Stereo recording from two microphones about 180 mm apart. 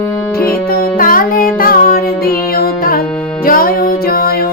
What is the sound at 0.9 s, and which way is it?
Music, 50° left (ahead or behind).